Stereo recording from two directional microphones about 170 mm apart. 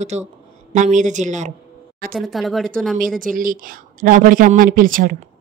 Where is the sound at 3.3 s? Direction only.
55° right (ahead or behind).